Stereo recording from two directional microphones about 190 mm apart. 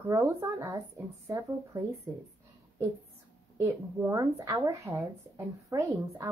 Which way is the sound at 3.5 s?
15° right (ahead or behind).